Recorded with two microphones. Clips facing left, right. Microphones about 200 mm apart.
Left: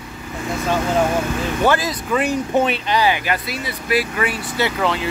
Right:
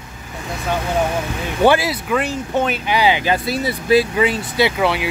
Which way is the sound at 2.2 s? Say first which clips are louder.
Left 2 dB; 10° left (ahead or behind).